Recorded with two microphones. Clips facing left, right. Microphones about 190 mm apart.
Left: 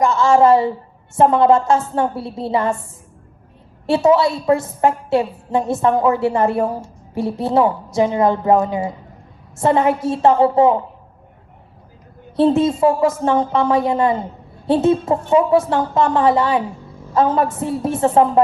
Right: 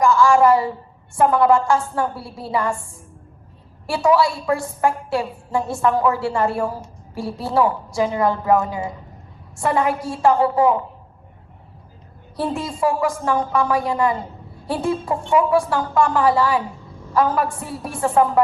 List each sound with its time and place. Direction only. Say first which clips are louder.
0.0 s a woman's voice: left 1 dB; 25° left (ahead or behind)
3.8 s a woman's voice: left 4 dB; 25° left (ahead or behind)
12.4 s a woman's voice: left 9 dB; 25° left (ahead or behind)